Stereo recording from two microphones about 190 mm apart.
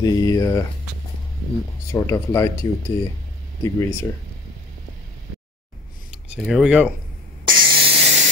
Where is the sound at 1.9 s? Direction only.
15° left (ahead or behind).